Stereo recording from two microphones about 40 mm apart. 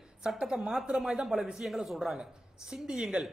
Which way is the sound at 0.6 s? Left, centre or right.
Centre.